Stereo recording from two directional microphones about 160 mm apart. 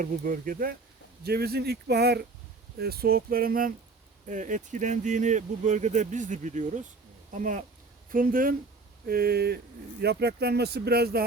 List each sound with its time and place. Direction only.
0.0 s speech: 55° right (ahead or behind)
1.2 s speech: 80° right
2.7 s speech: 75° right (ahead or behind)
4.3 s speech: 50° right (ahead or behind); by 9.6 s 75° right (ahead or behind)
10.0 s speech: 90° right